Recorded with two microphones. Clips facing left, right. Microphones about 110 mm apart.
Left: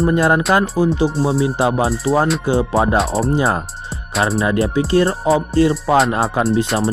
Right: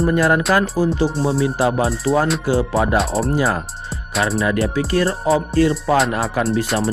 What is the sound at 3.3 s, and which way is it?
Speech, 30° left (ahead or behind).